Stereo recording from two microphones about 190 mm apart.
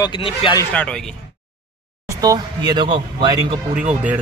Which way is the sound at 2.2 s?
20° right (ahead or behind).